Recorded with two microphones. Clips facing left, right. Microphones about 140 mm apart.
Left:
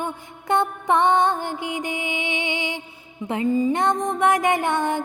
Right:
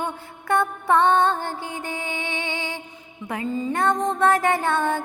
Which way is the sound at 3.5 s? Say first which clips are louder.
Left 2 dB; 15° left (ahead or behind).